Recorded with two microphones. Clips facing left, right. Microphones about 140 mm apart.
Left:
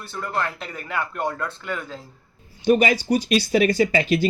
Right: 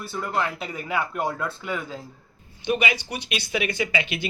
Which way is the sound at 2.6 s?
40° left (ahead or behind).